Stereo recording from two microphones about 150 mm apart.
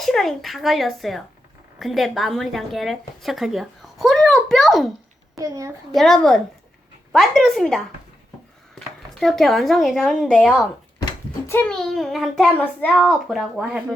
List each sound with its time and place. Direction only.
0.0 s a child's voice: centre (ahead or behind)
5.4 s a child's voice: 20° right (ahead or behind)
5.9 s a child's voice: centre (ahead or behind)
11.4 s a child's voice: 15° left (ahead or behind)
11.7 s a child's voice: centre (ahead or behind)